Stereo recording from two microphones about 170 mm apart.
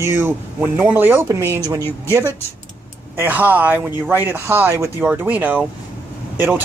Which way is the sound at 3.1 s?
10° right (ahead or behind).